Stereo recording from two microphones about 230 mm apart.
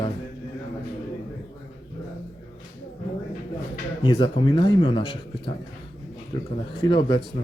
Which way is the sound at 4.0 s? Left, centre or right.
Centre.